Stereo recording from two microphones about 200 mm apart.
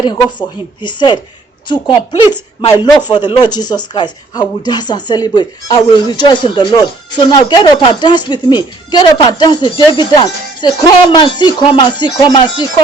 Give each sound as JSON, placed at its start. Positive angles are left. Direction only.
{"t": 0.0, "sound": "a woman's voice", "side_deg": 20}